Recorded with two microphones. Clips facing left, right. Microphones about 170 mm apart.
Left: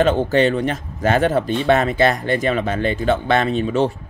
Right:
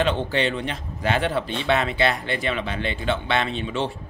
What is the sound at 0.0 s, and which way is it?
Speech, 45° left (ahead or behind).